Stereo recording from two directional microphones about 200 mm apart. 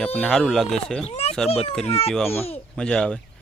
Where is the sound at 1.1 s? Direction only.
30° left (ahead or behind).